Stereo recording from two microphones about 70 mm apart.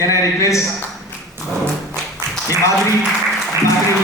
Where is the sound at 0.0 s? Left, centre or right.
Left.